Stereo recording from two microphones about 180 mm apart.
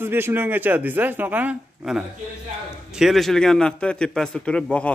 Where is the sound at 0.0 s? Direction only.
10° right (ahead or behind).